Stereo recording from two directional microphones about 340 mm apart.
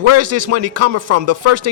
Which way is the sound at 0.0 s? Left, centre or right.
Right.